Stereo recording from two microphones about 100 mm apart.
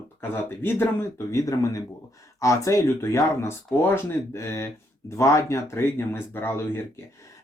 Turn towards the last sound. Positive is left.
turn(degrees=25)  # may be behind; listen again after turning